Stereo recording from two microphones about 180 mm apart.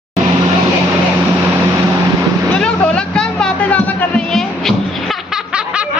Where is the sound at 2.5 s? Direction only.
5° left (ahead or behind).